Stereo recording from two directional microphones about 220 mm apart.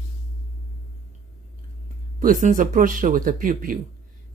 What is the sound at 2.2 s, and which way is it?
Speech, 35° right (ahead or behind).